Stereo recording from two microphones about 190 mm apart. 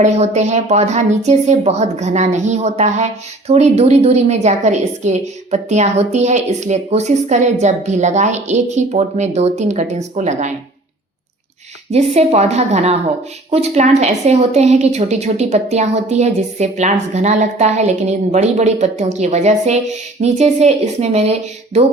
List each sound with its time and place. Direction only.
0.0 s a woman's voice: 35° right (ahead or behind)
11.9 s a woman's voice: 35° right (ahead or behind)